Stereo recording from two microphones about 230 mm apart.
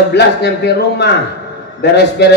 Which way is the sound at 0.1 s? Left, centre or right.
Left.